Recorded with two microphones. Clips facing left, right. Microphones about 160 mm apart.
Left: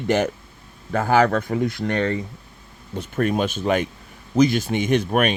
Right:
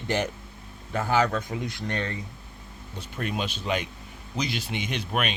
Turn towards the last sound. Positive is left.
turn(degrees=50)  # may be behind; listen again after turning